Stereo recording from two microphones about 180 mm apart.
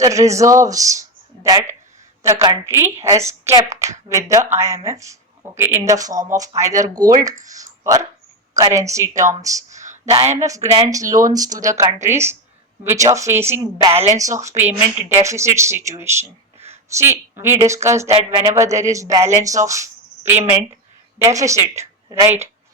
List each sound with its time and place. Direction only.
0.0 s a man's voice: 15° right (ahead or behind)